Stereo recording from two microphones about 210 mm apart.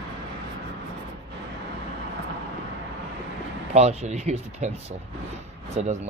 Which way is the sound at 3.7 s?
30° right (ahead or behind).